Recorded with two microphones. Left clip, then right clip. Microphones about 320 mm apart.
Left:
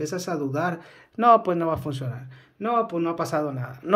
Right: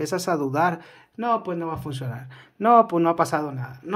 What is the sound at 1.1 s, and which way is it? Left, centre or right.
Speech, centre.